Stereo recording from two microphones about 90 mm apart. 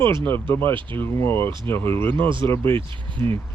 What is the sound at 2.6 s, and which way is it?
Speech, 70° right (ahead or behind).